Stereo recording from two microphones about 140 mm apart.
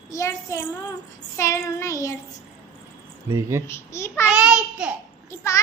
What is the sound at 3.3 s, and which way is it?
Speech, 20° right (ahead or behind).